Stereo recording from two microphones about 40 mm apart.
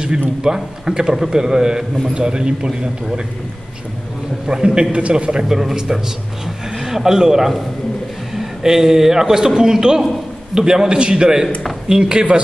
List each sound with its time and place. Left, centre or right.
0.5 s a man's voice: centre
4.5 s a man's voice: right